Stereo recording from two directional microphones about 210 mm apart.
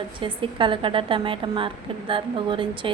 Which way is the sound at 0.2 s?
25° right (ahead or behind).